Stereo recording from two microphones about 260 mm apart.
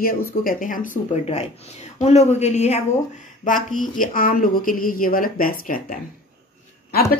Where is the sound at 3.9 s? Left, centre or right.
Left.